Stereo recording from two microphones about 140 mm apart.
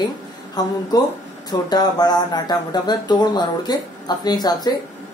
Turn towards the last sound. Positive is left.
turn(degrees=30)  # may be behind; listen again after turning